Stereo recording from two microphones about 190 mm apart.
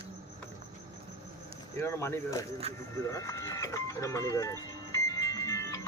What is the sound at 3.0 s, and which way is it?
Music, 15° left (ahead or behind).